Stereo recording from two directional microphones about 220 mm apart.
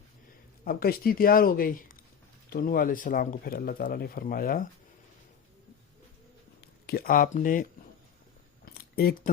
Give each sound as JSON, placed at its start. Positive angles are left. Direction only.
{"t": 0.6, "sound": "speech", "side_deg": 40}
{"t": 6.6, "sound": "speech", "side_deg": 45}
{"t": 8.7, "sound": "a sound", "side_deg": 45}